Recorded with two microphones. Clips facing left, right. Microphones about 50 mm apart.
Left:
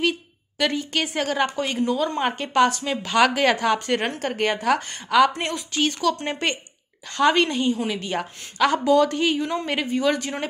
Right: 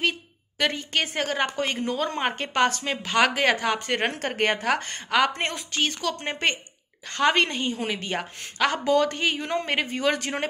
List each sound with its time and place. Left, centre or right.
0.6 s a woman's voice: right
4.4 s a woman's voice: right